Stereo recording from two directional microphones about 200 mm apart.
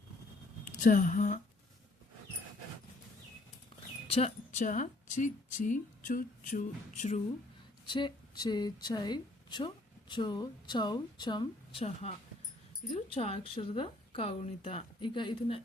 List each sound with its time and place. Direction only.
0.7 s speech: 40° left (ahead or behind)
4.1 s speech: 35° left (ahead or behind)
7.9 s a woman's voice: 25° left (ahead or behind)